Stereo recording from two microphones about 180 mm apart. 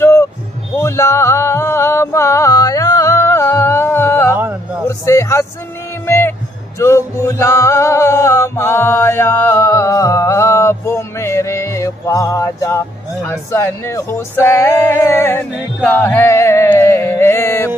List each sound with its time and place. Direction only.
0.0 s music: 15° left (ahead or behind)
4.8 s a sound: 15° left (ahead or behind)
6.8 s music: 15° left (ahead or behind)